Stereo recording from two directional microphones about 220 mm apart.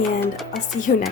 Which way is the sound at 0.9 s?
40° left (ahead or behind).